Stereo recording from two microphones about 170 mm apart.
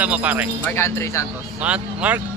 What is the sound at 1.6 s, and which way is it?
Speech, 5° right (ahead or behind).